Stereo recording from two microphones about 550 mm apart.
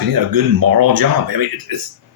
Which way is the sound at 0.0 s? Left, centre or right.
Right.